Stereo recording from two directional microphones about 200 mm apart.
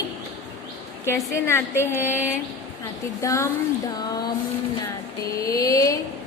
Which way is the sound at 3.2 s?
15° left (ahead or behind).